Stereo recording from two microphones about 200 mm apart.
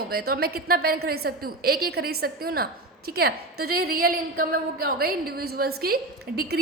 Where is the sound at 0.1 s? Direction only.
50° right (ahead or behind).